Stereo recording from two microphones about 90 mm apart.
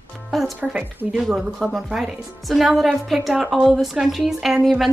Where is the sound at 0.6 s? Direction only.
10° right (ahead or behind).